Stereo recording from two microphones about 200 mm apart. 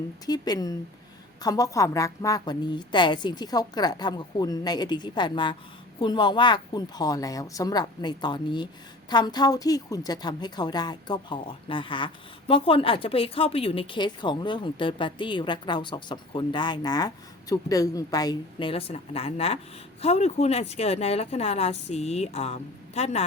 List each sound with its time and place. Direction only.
0.3 s a woman's voice: 20° left (ahead or behind)